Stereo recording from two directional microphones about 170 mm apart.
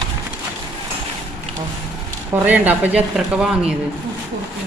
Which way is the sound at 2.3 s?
10° right (ahead or behind).